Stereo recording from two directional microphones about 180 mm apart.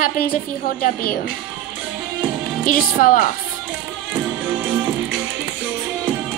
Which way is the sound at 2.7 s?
50° left (ahead or behind).